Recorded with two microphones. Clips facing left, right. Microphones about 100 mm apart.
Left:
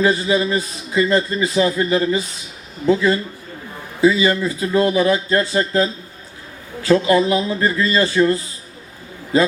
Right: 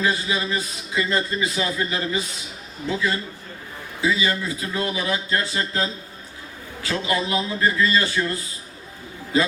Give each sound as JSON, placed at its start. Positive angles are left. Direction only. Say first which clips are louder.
{"t": 0.0, "sound": "a man's voice", "louder": "left 7 dB", "side_deg": 40}
{"t": 4.0, "sound": "speech", "louder": "left 8 dB", "side_deg": 40}